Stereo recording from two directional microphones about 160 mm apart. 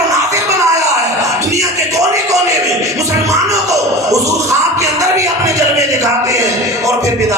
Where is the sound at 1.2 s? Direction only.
20° right (ahead or behind).